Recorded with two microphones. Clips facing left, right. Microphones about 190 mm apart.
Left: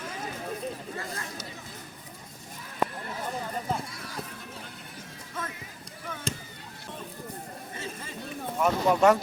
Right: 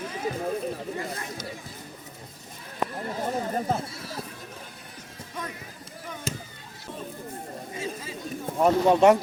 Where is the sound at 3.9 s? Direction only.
25° right (ahead or behind).